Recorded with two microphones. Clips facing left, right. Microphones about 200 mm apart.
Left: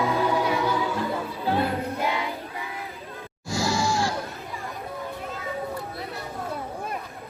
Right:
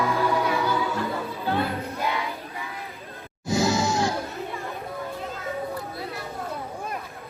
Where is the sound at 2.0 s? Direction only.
20° left (ahead or behind).